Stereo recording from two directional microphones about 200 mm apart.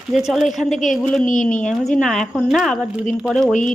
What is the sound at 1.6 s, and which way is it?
Speech, centre (ahead or behind).